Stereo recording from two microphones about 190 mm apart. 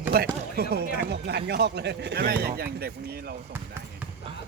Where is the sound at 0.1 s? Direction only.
55° right (ahead or behind).